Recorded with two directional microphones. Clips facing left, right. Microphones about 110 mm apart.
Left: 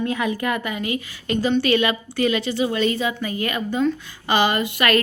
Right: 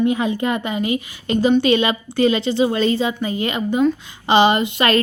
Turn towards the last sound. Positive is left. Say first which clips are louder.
# right 3 dB
turn(degrees=-25)  # may be behind; listen again after turning